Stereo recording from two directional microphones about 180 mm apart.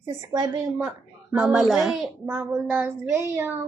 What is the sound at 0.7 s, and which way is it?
A child's voice, 5° right (ahead or behind).